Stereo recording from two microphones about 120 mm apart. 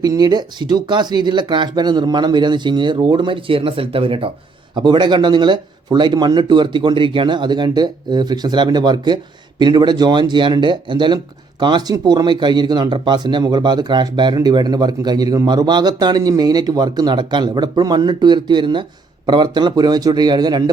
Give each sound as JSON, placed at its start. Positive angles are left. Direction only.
{"t": 0.0, "sound": "speech", "side_deg": -35}